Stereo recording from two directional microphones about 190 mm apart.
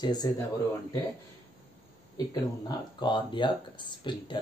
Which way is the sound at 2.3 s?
20° left (ahead or behind).